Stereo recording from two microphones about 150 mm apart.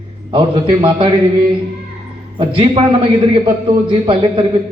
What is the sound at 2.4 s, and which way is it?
Speech, 35° right (ahead or behind).